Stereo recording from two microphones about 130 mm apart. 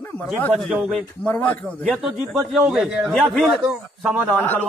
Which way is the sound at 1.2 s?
15° left (ahead or behind).